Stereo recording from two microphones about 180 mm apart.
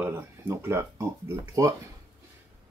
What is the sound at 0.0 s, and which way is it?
Speech, 10° right (ahead or behind).